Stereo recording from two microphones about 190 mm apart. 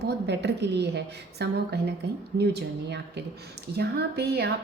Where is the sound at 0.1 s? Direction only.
65° right (ahead or behind).